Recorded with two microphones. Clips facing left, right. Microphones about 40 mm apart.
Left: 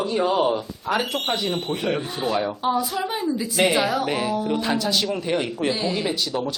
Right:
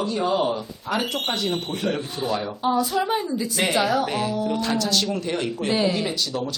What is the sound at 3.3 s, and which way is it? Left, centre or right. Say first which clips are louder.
A woman's voice: left 5 dB; centre.